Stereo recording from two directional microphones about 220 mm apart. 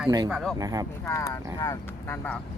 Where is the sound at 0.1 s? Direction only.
15° right (ahead or behind).